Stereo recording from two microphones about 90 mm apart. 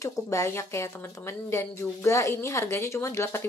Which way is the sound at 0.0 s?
40° left (ahead or behind).